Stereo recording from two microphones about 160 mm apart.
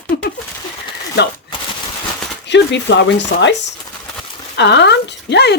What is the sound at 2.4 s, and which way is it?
Speech, 90° left.